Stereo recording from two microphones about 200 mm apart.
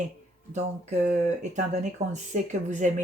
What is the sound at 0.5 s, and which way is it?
Speech, 35° right (ahead or behind).